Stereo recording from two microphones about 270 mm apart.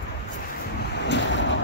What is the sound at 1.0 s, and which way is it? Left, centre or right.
Ocean, left.